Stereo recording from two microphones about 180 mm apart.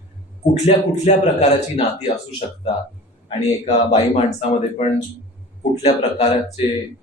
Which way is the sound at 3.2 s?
35° left (ahead or behind).